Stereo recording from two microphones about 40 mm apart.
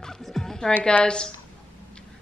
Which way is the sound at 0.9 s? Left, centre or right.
Left.